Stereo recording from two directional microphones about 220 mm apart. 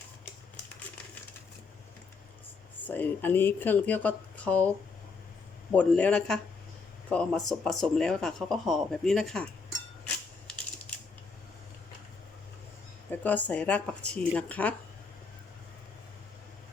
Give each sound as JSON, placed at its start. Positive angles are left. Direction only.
{"t": 2.8, "sound": "speech", "side_deg": 10}
{"t": 5.7, "sound": "speech", "side_deg": 5}
{"t": 13.1, "sound": "speech", "side_deg": 5}